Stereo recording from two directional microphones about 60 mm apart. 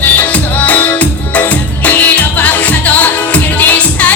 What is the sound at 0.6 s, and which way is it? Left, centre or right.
Music, left.